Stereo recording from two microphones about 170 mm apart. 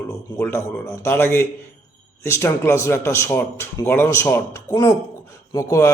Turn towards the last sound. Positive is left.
turn(degrees=15)  # may be behind; listen again after turning